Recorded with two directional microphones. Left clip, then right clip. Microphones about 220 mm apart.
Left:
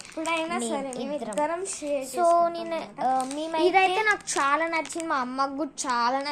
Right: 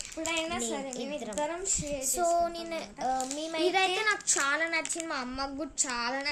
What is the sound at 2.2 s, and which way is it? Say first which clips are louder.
Child singing: left 7 dB; 5° right (ahead or behind).